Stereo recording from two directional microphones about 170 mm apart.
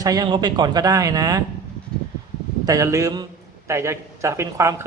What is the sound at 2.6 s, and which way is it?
A man's voice, 20° right (ahead or behind).